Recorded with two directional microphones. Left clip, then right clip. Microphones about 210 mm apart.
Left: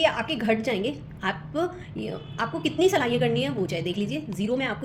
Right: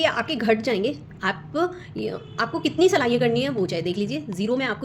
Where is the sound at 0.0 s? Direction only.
30° right (ahead or behind).